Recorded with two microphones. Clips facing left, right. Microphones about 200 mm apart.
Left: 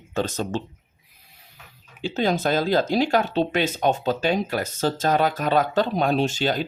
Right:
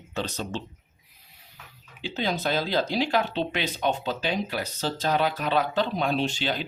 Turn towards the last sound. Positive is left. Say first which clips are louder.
# left 5 dB
turn(degrees=45)  # may be behind; listen again after turning